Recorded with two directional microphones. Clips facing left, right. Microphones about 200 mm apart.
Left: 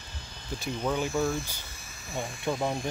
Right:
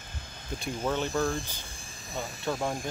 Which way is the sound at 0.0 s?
50° right (ahead or behind).